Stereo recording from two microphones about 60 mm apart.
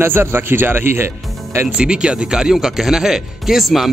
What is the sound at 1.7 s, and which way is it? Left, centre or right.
Speech, centre.